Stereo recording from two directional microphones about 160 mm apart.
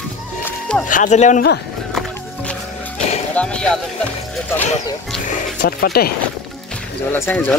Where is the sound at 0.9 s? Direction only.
50° left (ahead or behind).